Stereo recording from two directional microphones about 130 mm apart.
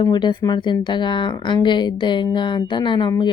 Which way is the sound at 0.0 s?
35° left (ahead or behind).